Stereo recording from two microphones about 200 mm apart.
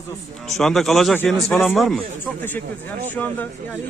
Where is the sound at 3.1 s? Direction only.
10° left (ahead or behind).